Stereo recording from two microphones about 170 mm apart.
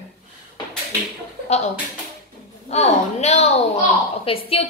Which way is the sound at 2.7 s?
40° left (ahead or behind).